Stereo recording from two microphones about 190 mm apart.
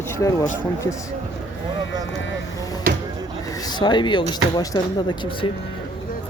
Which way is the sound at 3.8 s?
25° left (ahead or behind).